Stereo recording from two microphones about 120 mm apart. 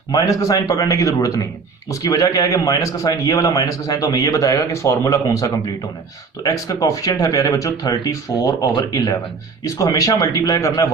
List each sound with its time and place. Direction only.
0.1 s a man's voice: 30° left (ahead or behind)